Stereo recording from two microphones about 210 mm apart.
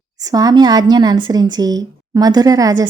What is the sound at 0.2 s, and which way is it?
A woman's voice, 15° right (ahead or behind).